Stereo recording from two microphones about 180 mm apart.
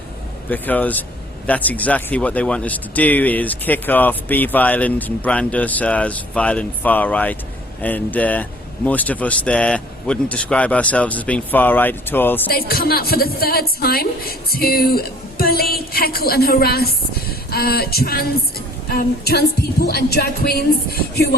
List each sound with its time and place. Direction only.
0.5 s speech: 10° left (ahead or behind)
12.5 s a woman's voice: 55° left (ahead or behind)